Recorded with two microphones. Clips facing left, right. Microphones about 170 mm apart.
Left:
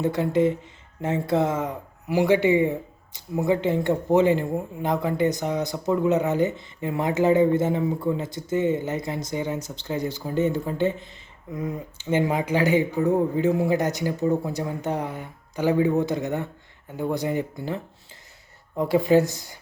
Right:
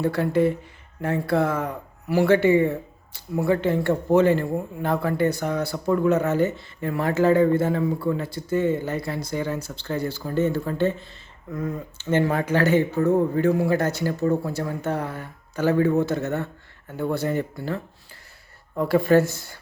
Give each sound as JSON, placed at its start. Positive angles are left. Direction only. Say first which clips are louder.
{"t": 0.0, "sound": "speech", "louder": "even", "side_deg": 20}